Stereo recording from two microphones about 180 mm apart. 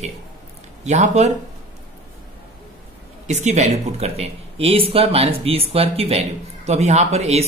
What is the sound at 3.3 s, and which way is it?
Speech, 40° right (ahead or behind).